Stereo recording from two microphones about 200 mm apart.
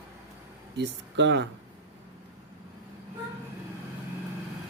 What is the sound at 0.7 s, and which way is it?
Speech, 60° right (ahead or behind).